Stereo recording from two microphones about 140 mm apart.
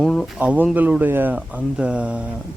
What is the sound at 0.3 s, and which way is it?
Speech, 10° right (ahead or behind).